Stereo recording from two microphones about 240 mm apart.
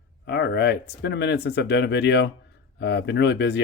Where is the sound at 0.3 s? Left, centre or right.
Left.